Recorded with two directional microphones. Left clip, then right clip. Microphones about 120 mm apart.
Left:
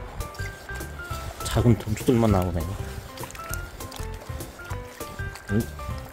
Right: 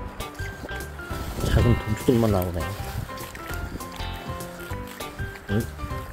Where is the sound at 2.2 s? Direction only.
55° left (ahead or behind).